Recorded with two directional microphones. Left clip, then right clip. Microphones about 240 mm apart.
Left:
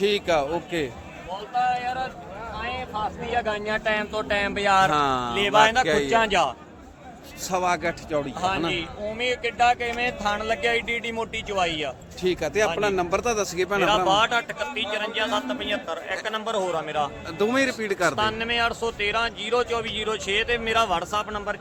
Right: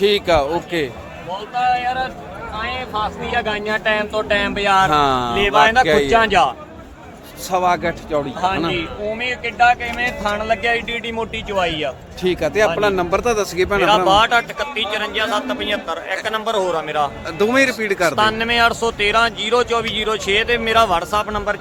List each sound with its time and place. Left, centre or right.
0.0 s a man's voice: centre; by 4.9 s left
4.9 s a man's voice: centre
5.3 s speech: centre
7.5 s speech: centre
8.7 s speech: left; by 11.9 s centre
12.2 s a man's voice: centre